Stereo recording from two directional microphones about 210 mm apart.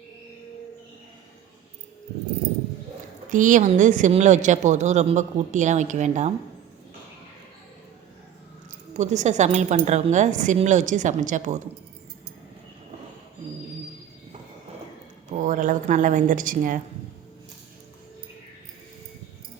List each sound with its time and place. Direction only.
3.2 s speech: 40° right (ahead or behind)
8.9 s speech: 35° right (ahead or behind)
15.3 s speech: 40° right (ahead or behind)